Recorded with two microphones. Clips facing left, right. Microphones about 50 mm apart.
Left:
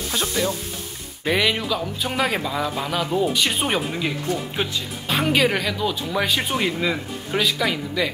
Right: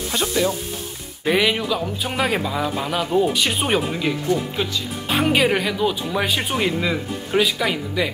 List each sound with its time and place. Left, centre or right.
0.1 s speech: centre
5.1 s speech: centre